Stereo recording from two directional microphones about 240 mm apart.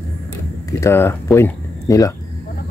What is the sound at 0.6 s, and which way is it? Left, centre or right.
Speech, centre.